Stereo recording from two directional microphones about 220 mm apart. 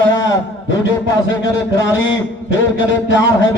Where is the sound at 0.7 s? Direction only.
55° left (ahead or behind).